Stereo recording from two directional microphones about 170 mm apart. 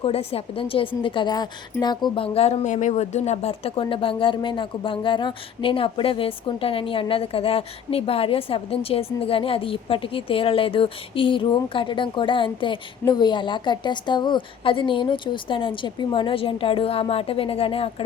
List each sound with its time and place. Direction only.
0.0 s a woman's voice: 35° left (ahead or behind)